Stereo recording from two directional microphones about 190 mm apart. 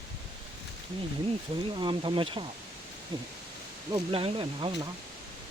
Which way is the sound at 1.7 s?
25° right (ahead or behind).